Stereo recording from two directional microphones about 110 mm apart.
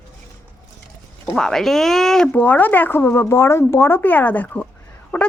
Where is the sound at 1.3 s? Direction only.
5° left (ahead or behind).